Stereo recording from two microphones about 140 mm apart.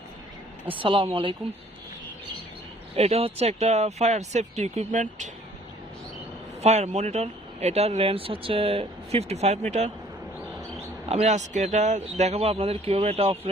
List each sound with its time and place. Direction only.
0.7 s speech: 40° right (ahead or behind)
2.9 s speech: 45° right (ahead or behind); by 5.3 s 60° right (ahead or behind)
6.6 s speech: 55° right (ahead or behind)
11.1 s speech: 55° right (ahead or behind)